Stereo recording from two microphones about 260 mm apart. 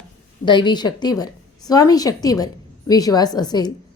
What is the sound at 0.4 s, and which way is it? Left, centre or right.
A woman's voice, centre.